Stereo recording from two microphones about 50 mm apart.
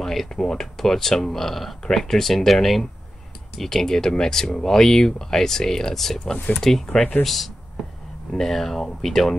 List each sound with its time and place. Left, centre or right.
0.0 s speech: centre
6.3 s speech: left
6.6 s speech: centre